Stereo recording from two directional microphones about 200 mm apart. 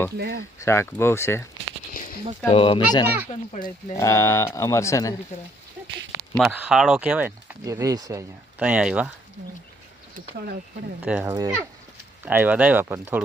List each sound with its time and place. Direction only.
0.2 s speech: 50° right (ahead or behind)
0.6 s speech: 15° left (ahead or behind)
1.9 s a sound: 45° left (ahead or behind)
2.5 s speech: 25° left (ahead or behind)
3.5 s speech: 40° left (ahead or behind)
3.9 s speech: 15° left (ahead or behind)
6.3 s speech: 5° right (ahead or behind)
10.2 s speech: 50° right (ahead or behind)
11.0 s speech: 5° right (ahead or behind)